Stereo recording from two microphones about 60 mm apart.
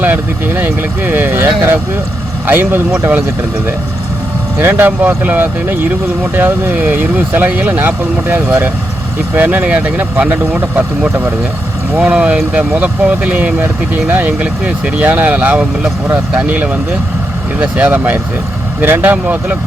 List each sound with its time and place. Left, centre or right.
0.0 s speech: right
4.5 s speech: right
11.9 s speech: centre
14.3 s speech: right